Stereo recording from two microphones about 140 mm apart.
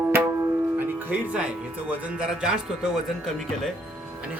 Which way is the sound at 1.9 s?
5° right (ahead or behind).